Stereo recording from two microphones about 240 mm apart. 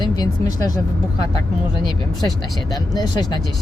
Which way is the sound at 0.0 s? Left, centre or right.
Centre.